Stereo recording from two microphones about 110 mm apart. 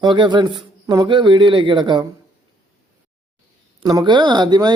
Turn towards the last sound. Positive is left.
turn(degrees=-40)  # may be behind; listen again after turning